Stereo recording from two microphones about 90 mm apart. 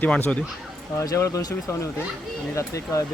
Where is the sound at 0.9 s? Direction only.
35° left (ahead or behind).